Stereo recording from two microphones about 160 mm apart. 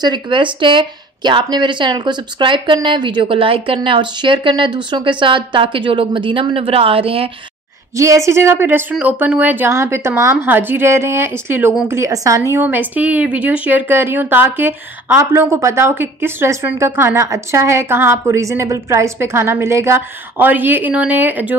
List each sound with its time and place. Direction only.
0.0 s speech: 30° right (ahead or behind)
8.0 s a woman's voice: 20° right (ahead or behind)